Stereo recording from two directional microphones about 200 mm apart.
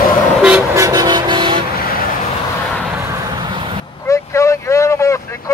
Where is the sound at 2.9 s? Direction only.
15° right (ahead or behind).